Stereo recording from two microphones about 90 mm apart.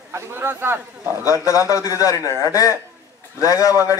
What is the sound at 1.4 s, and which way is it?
A man's voice, 40° left (ahead or behind).